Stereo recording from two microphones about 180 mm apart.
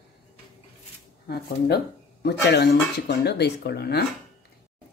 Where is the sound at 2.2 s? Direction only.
65° left (ahead or behind).